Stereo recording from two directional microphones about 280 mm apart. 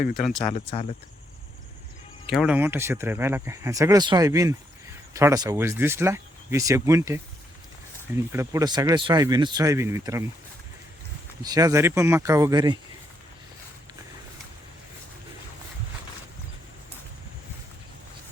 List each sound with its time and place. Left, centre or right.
0.1 s speech: centre
0.4 s speech: centre
2.2 s speech: centre
11.4 s speech: centre